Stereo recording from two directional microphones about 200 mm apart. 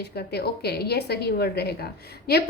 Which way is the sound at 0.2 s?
55° left (ahead or behind).